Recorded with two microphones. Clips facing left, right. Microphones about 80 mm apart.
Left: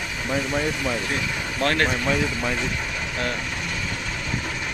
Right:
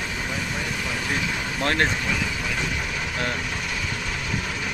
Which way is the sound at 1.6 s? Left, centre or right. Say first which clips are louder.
Left 1 dB; right.